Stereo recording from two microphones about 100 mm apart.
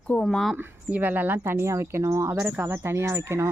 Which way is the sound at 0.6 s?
20° right (ahead or behind).